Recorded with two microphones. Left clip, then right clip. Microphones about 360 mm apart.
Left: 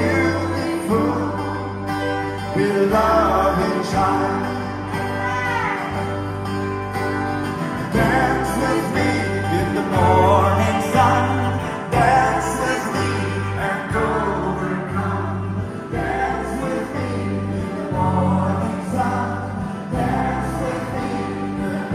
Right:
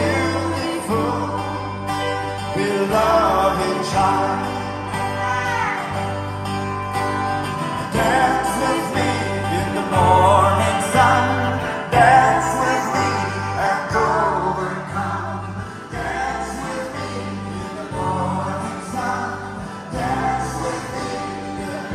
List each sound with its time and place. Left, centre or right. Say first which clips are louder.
0.0 s music: left 1 dB; right
7.0 s music: right 2 dB; right